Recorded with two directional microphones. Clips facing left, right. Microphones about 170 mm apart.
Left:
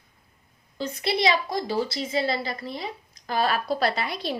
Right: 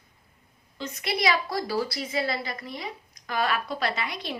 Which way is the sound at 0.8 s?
30° left (ahead or behind).